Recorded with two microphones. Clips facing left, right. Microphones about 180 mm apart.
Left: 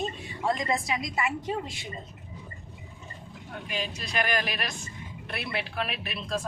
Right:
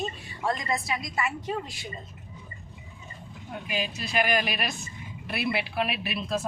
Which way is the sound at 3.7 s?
5° right (ahead or behind).